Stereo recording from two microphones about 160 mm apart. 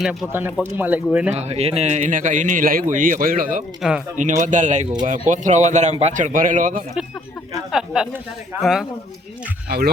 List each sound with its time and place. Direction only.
0.0 s speech: centre (ahead or behind)
1.3 s a man's voice: 45° right (ahead or behind); by 3.6 s 60° right (ahead or behind)
3.8 s speech: 5° right (ahead or behind)
4.2 s a man's voice: 50° right (ahead or behind)
7.7 s speech: 5° right (ahead or behind)
9.6 s speech: 85° right